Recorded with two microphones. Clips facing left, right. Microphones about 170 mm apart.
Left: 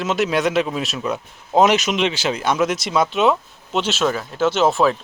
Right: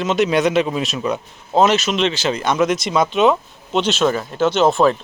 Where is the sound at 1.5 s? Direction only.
15° left (ahead or behind).